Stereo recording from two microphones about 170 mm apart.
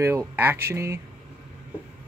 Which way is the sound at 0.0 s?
15° right (ahead or behind).